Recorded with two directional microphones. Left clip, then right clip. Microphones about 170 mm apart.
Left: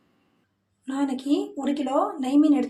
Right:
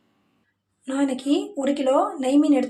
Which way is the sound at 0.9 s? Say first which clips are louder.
Right 3 dB; 25° right (ahead or behind).